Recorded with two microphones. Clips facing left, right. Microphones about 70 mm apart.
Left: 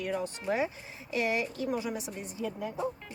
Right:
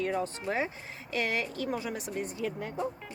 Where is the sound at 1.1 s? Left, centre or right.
Right.